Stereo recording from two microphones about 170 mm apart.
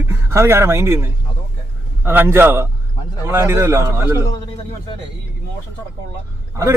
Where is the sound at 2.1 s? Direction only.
15° right (ahead or behind).